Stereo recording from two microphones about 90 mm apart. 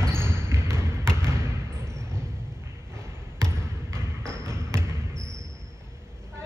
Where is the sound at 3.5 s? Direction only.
30° right (ahead or behind).